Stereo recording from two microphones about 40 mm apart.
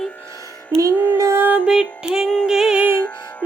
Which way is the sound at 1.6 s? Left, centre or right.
Right.